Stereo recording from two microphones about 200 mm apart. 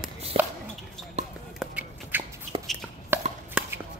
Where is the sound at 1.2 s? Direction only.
35° right (ahead or behind).